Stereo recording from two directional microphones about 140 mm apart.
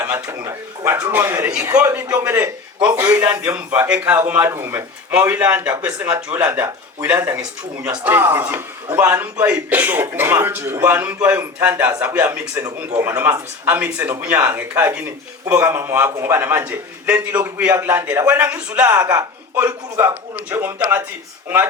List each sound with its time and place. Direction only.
0.0 s a man's voice: 20° right (ahead or behind)